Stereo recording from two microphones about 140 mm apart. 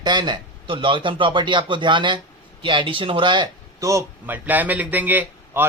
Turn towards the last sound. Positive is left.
turn(degrees=-15)  # may be behind; listen again after turning